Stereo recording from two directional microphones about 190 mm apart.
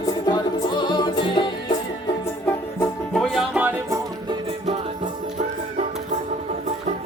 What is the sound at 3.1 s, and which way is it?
Music, centre (ahead or behind).